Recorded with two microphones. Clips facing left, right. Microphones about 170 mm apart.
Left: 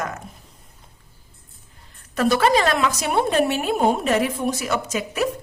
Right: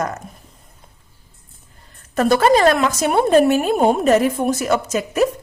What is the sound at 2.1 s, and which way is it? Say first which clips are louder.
A woman's voice: right 4 dB; 45° right (ahead or behind).